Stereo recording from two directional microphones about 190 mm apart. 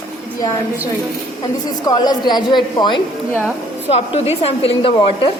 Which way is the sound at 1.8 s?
20° left (ahead or behind).